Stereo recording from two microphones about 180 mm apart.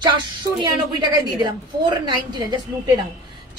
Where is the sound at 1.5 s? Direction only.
20° right (ahead or behind).